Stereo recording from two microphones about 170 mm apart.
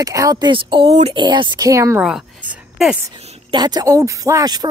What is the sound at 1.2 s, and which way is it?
Speech, 25° right (ahead or behind).